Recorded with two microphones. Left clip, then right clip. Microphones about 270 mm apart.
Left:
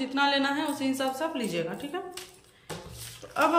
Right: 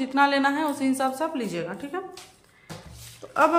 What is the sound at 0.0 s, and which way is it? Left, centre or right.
A woman's voice, centre.